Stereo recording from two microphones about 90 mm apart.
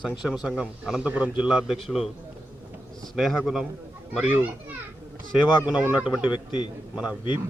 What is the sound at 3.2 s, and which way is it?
Speech, centre (ahead or behind).